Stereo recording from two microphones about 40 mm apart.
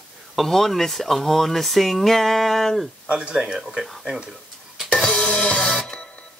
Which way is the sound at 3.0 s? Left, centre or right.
Right.